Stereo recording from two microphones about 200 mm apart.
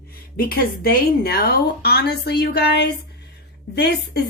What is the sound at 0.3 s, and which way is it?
A woman's voice, 50° left (ahead or behind).